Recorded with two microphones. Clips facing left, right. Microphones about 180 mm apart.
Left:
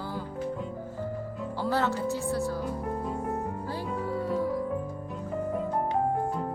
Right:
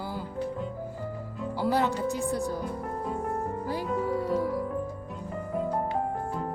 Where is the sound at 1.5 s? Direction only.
15° right (ahead or behind).